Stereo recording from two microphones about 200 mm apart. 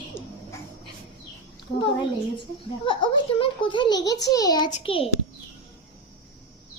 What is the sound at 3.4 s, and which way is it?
A child's voice, 25° left (ahead or behind).